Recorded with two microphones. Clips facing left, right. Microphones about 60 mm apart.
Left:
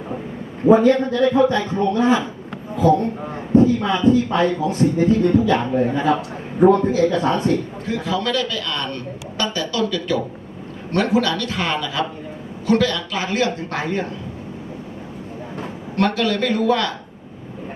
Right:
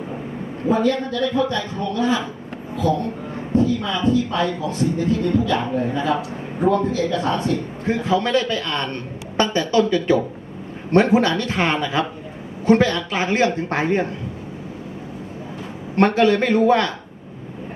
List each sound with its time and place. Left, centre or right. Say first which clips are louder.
0.7 s a man's voice: left 6 dB; left
7.9 s a man's voice: right 3 dB; right
16.0 s a man's voice: right 4 dB; right